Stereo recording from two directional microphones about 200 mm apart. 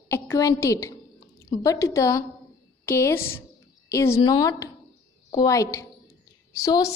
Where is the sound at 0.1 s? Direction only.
15° left (ahead or behind).